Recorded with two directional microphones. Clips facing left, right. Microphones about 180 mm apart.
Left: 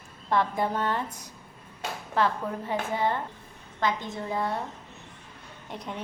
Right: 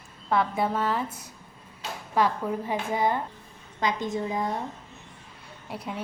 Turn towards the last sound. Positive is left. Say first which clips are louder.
# right 2 dB
turn(degrees=-5)  # may be behind; listen again after turning